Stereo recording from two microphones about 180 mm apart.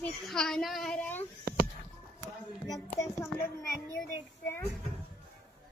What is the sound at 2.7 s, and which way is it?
A child's voice, 20° left (ahead or behind).